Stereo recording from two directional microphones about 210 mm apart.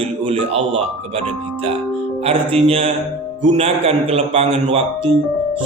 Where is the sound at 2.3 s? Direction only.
30° right (ahead or behind).